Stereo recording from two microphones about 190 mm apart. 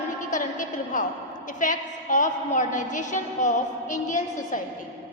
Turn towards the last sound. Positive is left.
turn(degrees=40)  # may be behind; listen again after turning